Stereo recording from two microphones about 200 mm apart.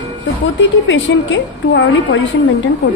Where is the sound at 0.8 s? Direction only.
65° left (ahead or behind).